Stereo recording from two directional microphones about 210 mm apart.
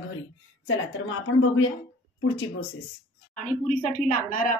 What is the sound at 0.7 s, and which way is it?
Speech, 70° left (ahead or behind).